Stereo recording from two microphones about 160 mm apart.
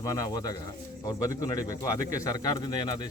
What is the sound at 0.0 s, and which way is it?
Speech, 20° left (ahead or behind).